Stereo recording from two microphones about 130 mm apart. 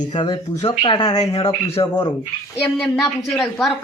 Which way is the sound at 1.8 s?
20° left (ahead or behind).